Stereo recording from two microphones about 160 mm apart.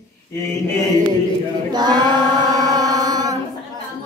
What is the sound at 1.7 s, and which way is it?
Female singing, 25° right (ahead or behind).